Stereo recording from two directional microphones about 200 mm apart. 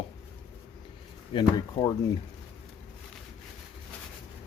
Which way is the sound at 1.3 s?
20° left (ahead or behind).